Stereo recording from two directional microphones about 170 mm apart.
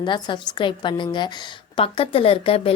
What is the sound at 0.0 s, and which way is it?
A woman's voice, 25° left (ahead or behind).